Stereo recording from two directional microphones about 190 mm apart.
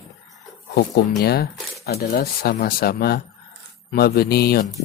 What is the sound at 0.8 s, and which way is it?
Speech, 60° left (ahead or behind).